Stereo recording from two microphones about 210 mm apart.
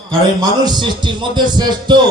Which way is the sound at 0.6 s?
20° right (ahead or behind).